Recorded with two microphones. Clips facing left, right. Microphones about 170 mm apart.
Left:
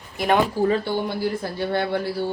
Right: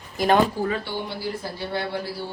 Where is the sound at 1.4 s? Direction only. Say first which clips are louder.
Left 3 dB; 55° left (ahead or behind).